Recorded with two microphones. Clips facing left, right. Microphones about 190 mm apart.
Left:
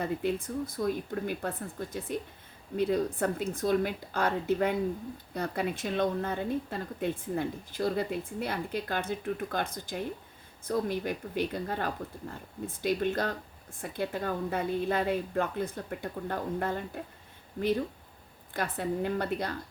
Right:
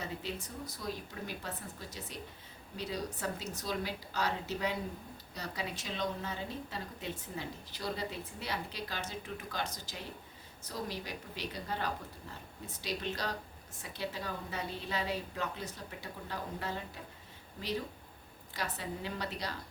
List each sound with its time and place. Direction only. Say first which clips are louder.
0.0 s speech: left 10 dB; 55° left (ahead or behind)